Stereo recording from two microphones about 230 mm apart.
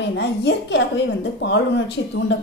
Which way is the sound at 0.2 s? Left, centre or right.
Left.